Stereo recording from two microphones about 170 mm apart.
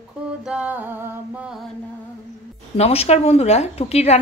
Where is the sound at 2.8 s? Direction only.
35° left (ahead or behind).